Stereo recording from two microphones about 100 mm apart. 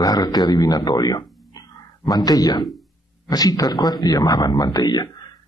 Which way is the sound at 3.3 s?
40° left (ahead or behind).